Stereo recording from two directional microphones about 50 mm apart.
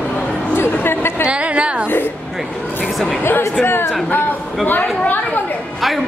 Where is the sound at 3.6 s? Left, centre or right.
Left.